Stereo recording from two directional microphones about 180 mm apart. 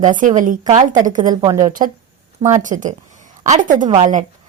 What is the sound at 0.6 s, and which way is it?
A woman's voice, 30° right (ahead or behind).